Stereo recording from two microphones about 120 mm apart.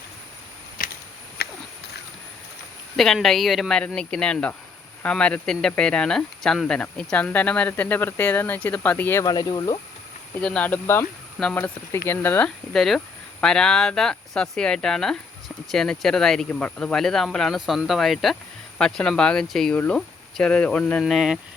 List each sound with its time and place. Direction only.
2.9 s speech: 5° left (ahead or behind)
9.2 s speech: 35° left (ahead or behind)
10.3 s speech: 10° left (ahead or behind)
12.7 s speech: centre (ahead or behind)
21.0 s speech: 5° right (ahead or behind)